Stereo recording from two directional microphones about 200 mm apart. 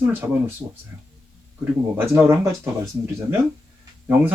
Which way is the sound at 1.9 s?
10° right (ahead or behind).